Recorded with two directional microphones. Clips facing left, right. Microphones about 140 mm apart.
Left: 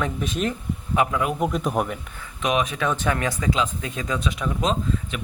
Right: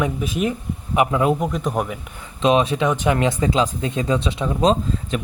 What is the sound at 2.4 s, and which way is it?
Speech, 30° right (ahead or behind).